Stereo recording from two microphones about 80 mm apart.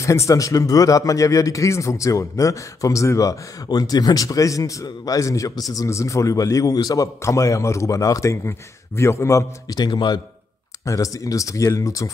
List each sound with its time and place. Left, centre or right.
0.0 s a man's voice: left
9.7 s speech: left
10.9 s speech: left